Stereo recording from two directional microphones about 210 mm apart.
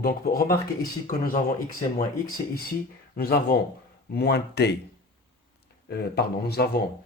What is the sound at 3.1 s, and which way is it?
Speech, 45° left (ahead or behind).